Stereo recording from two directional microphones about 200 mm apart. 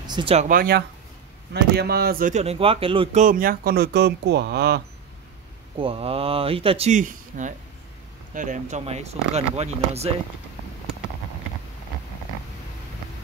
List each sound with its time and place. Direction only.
0.0 s speech: 25° right (ahead or behind)
0.5 s speech: 50° right (ahead or behind); by 3.2 s 25° right (ahead or behind)
3.2 s speech: 45° right (ahead or behind)
5.8 s speech: 30° right (ahead or behind)